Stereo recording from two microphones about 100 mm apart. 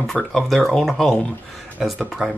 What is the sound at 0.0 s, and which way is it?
Speech, 5° left (ahead or behind).